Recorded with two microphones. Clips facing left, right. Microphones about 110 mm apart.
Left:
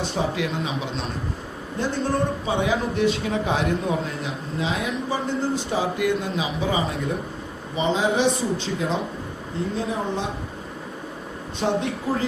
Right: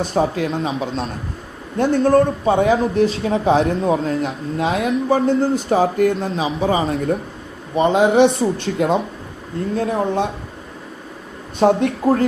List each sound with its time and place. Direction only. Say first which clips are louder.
0.0 s a man's voice: right 6 dB; 45° right (ahead or behind)
1.8 s a man's voice: right 10 dB; 55° right (ahead or behind); by 4.3 s 35° right (ahead or behind)
4.5 s a man's voice: right 7 dB; 55° right (ahead or behind)
7.8 s speech: right 8 dB; 60° right (ahead or behind)
11.6 s speech: right 9 dB; 50° right (ahead or behind)